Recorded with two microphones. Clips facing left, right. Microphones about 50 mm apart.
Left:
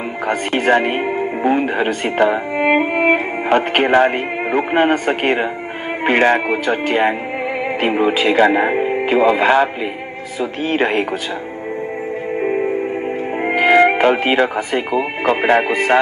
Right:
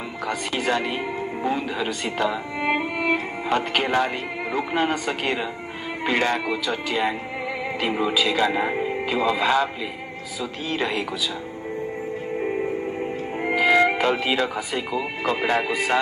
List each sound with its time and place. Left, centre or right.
0.3 s speech: left
12.4 s music: left
13.4 s speech: left